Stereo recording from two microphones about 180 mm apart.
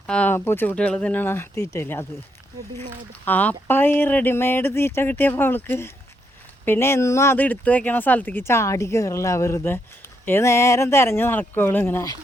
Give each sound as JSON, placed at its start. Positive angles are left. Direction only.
{"t": 0.1, "sound": "speech", "side_deg": 10}
{"t": 3.2, "sound": "speech", "side_deg": 10}